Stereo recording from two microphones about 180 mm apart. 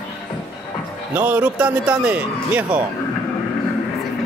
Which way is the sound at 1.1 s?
10° right (ahead or behind).